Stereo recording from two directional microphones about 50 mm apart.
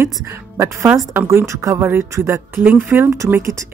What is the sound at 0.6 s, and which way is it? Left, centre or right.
Speech, right.